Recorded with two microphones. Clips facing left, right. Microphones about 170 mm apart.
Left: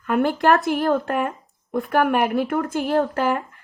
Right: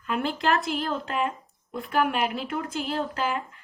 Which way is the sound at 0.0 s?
55° left (ahead or behind).